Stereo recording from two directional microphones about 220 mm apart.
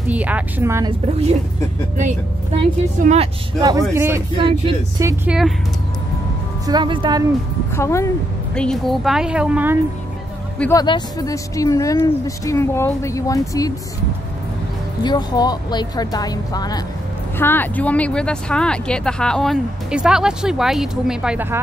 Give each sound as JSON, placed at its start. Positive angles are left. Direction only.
{"t": 0.1, "sound": "a woman's voice", "side_deg": -5}
{"t": 2.0, "sound": "speech", "side_deg": -30}
{"t": 3.9, "sound": "a woman's voice", "side_deg": -10}
{"t": 4.4, "sound": "speech", "side_deg": -20}
{"t": 6.6, "sound": "speech", "side_deg": -20}
{"t": 7.7, "sound": "speech", "side_deg": 10}
{"t": 8.5, "sound": "speech", "side_deg": 0}
{"t": 10.6, "sound": "speech", "side_deg": 15}
{"t": 15.0, "sound": "speech", "side_deg": 20}